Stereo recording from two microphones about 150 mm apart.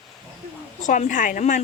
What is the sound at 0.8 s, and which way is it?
Speech, 55° left (ahead or behind).